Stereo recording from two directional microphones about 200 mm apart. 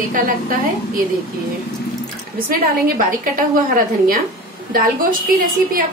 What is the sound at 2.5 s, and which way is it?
A woman's voice, 45° right (ahead or behind).